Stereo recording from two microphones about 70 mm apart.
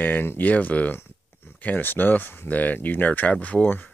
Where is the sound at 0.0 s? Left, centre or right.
Left.